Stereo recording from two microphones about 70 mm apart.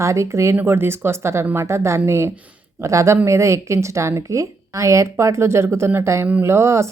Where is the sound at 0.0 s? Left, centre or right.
Right.